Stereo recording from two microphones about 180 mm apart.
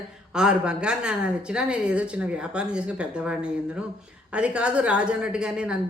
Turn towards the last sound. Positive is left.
turn(degrees=-5)  # may be behind; listen again after turning